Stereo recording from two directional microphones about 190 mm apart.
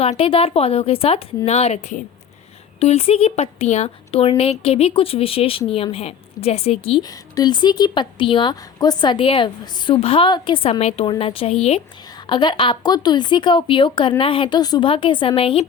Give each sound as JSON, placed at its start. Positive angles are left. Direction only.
{"t": 0.0, "sound": "a woman's voice", "side_deg": 30}